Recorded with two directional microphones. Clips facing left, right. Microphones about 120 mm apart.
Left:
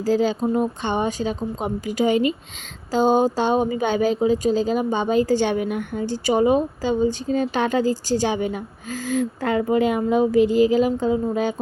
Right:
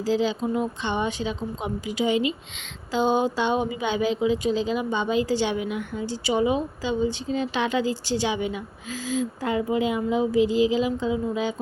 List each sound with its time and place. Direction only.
0.0 s speech: 45° left (ahead or behind)